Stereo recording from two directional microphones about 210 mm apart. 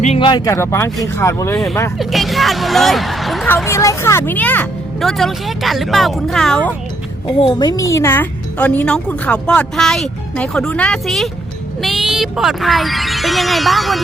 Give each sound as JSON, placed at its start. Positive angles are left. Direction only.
{"t": 0.0, "sound": "speech", "side_deg": 25}
{"t": 2.0, "sound": "speech", "side_deg": 0}
{"t": 7.4, "sound": "speech", "side_deg": 20}